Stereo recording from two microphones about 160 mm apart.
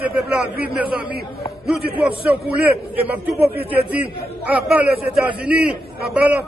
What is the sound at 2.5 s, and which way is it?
Speech, 10° right (ahead or behind).